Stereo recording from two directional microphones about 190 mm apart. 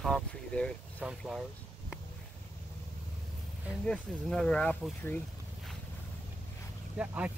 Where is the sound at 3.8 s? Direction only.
5° left (ahead or behind).